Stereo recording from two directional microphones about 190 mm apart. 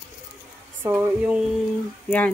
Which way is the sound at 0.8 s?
10° right (ahead or behind).